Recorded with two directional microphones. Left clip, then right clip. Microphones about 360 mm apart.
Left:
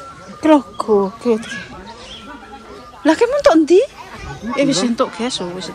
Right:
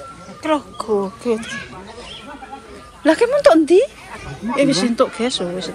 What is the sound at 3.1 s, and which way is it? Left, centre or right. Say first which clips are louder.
Speech: even; centre.